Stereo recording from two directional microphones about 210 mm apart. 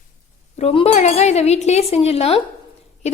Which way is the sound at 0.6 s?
30° left (ahead or behind).